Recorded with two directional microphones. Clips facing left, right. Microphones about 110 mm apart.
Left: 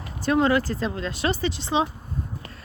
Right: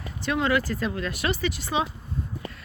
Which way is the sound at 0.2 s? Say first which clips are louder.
Left 4 dB; 35° left (ahead or behind).